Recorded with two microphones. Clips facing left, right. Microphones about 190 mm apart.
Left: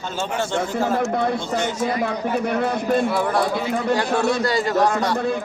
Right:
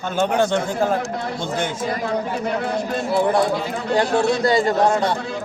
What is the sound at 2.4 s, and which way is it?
Speech, 55° left (ahead or behind).